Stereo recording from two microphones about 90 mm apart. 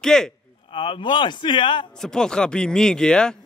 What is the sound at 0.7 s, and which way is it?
A man's voice, 70° left (ahead or behind).